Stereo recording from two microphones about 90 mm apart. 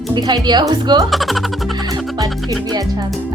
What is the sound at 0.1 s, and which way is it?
Speech, 55° right (ahead or behind).